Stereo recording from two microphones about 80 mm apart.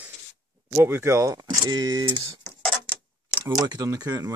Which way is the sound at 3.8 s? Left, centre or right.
Right.